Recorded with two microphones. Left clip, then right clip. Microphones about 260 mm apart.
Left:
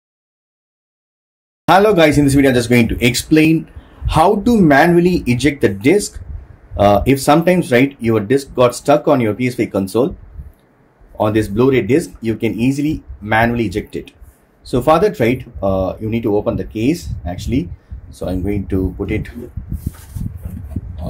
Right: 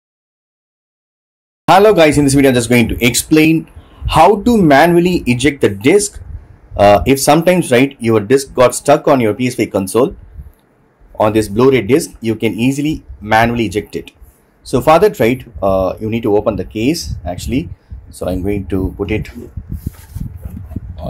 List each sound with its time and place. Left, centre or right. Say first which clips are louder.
1.7 s speech: right 3 dB; right
11.1 s speech: right 3 dB; right
16.9 s speech: right 2 dB; centre
17.2 s speech: right 2 dB; right